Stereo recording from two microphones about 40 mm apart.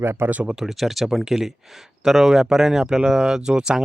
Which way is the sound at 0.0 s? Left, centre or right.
Right.